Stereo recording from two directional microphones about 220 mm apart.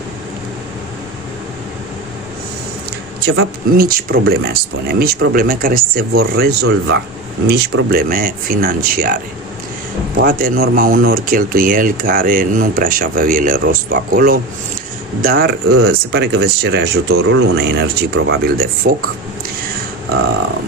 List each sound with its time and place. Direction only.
3.3 s speech: 45° right (ahead or behind)